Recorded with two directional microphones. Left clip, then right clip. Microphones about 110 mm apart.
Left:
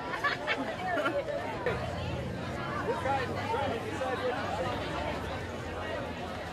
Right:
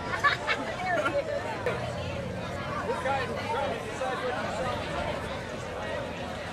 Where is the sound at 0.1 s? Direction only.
50° right (ahead or behind).